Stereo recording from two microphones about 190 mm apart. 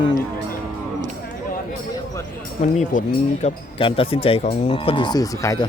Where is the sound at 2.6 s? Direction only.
40° left (ahead or behind).